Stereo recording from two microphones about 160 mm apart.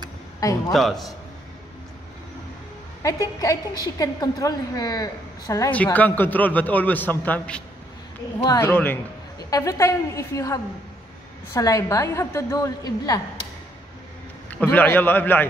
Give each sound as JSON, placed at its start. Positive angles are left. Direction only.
{"t": 0.4, "sound": "a woman's voice", "side_deg": 20}
{"t": 0.7, "sound": "a man's voice", "side_deg": 0}
{"t": 3.0, "sound": "a woman's voice", "side_deg": 20}
{"t": 5.9, "sound": "a man's voice", "side_deg": 10}
{"t": 14.5, "sound": "a man's voice", "side_deg": 10}